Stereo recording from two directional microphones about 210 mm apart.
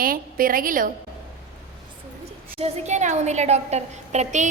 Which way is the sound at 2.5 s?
30° right (ahead or behind).